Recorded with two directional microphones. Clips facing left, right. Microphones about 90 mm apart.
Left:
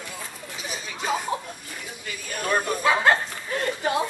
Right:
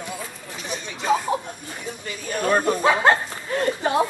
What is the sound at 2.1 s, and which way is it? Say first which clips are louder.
Speech: right 5 dB; 35° right (ahead or behind).